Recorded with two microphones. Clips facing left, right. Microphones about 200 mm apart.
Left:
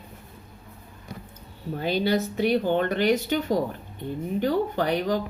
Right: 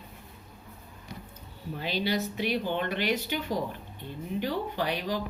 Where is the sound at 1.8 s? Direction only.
50° left (ahead or behind).